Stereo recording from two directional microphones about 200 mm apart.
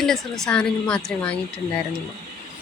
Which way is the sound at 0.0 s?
Centre (ahead or behind).